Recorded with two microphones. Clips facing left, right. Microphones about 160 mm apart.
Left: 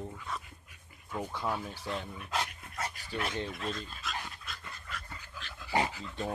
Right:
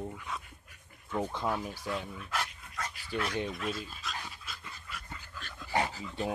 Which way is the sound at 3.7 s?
5° right (ahead or behind).